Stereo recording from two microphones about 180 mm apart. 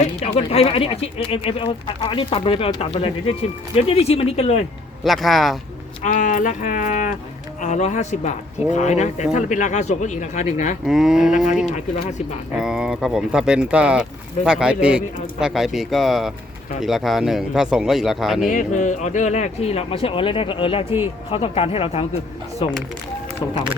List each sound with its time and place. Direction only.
0.0 s speech: 35° left (ahead or behind)
5.0 s speech: centre (ahead or behind)
6.0 s speech: 45° left (ahead or behind)
10.8 s speech: 5° right (ahead or behind)
11.7 s speech: 40° left (ahead or behind)
12.5 s speech: 5° right (ahead or behind)
18.4 s speech: 45° left (ahead or behind)